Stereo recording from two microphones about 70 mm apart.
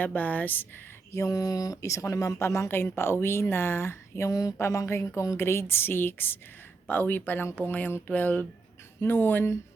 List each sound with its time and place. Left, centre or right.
0.0 s speech: left
1.1 s speech: left
4.3 s a sound: left
4.7 s a woman's voice: left